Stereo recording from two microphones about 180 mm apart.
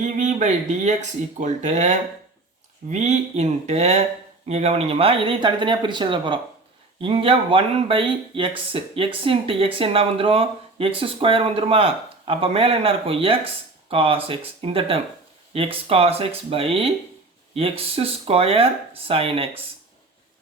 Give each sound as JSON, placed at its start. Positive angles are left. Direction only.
{"t": 0.0, "sound": "speech", "side_deg": -40}